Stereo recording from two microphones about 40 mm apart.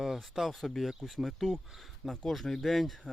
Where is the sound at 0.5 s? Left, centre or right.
Centre.